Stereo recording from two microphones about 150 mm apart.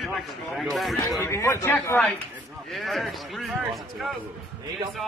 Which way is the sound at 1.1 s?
20° left (ahead or behind).